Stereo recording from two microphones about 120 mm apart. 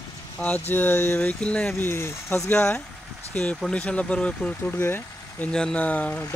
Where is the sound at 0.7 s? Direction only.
15° left (ahead or behind).